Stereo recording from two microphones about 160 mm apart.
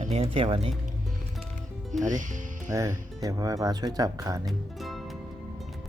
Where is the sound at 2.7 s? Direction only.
20° right (ahead or behind).